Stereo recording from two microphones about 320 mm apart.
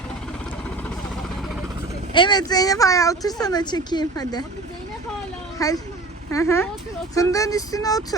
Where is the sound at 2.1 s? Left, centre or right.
Centre.